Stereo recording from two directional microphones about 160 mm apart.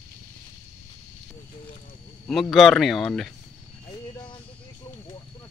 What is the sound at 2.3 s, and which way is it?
Speech, centre (ahead or behind).